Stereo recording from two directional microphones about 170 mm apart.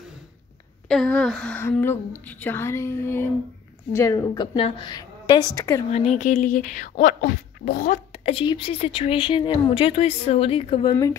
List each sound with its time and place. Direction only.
0.8 s a woman's voice: 5° left (ahead or behind)
4.6 s a woman's voice: 30° left (ahead or behind)
5.9 s speech: 40° left (ahead or behind)
8.1 s a woman's voice: 35° left (ahead or behind)